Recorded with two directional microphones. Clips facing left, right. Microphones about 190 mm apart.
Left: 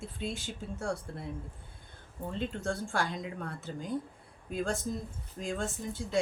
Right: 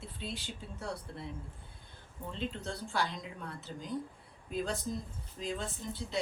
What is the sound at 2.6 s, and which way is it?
Speech, 50° left (ahead or behind).